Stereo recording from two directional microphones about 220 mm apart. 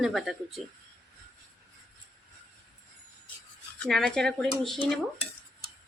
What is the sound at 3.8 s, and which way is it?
Speech, 5° left (ahead or behind).